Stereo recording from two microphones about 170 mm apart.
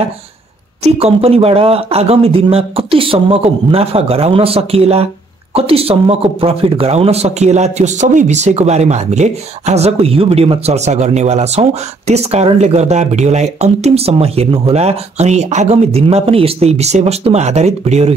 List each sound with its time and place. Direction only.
0.8 s speech: 35° right (ahead or behind)